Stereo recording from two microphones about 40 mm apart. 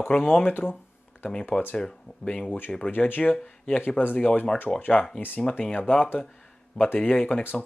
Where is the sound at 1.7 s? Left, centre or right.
Centre.